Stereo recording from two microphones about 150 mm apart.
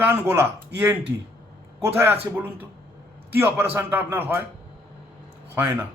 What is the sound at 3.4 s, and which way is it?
A man's voice, 15° right (ahead or behind).